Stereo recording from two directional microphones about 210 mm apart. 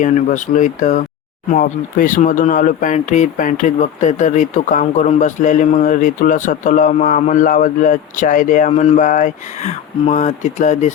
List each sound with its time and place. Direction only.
0.0 s speech: 35° left (ahead or behind)